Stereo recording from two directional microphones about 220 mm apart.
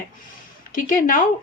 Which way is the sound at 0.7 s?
40° left (ahead or behind).